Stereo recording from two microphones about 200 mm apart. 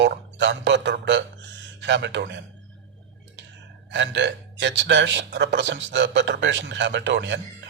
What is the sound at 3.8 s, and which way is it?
Speech, 65° right (ahead or behind).